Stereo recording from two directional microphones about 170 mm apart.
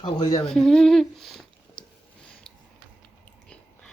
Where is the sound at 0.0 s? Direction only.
20° left (ahead or behind).